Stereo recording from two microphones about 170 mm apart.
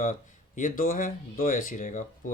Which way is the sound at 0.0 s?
50° left (ahead or behind).